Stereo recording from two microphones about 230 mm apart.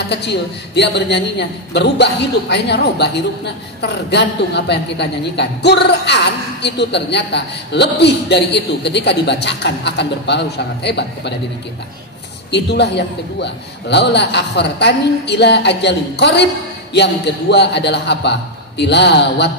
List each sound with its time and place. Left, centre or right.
0.1 s a man's voice: left
12.4 s a man's voice: left